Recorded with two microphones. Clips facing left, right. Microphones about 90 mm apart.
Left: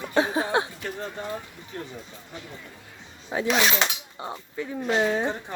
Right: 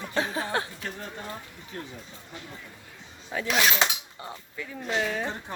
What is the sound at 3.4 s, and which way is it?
Speech, centre (ahead or behind).